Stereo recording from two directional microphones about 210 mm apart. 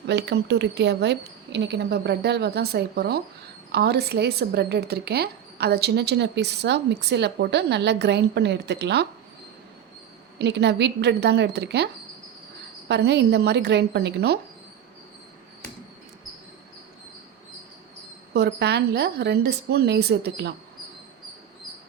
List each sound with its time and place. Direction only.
0.1 s a woman's voice: 55° right (ahead or behind)
10.3 s a woman's voice: 55° right (ahead or behind)
12.9 s a woman's voice: 55° right (ahead or behind)
18.3 s a woman's voice: 50° right (ahead or behind)